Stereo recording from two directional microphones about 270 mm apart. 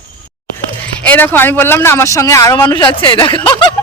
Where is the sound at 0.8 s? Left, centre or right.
Centre.